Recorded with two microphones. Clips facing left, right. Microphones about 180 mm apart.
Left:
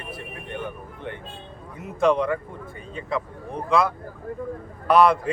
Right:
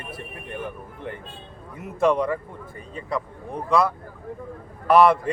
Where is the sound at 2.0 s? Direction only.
Centre (ahead or behind).